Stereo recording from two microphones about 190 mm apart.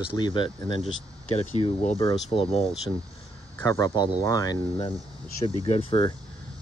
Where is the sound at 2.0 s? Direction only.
25° left (ahead or behind).